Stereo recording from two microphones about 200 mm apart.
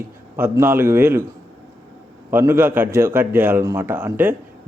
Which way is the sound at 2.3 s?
10° right (ahead or behind).